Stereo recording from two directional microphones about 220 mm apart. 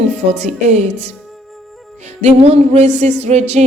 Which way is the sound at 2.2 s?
30° right (ahead or behind).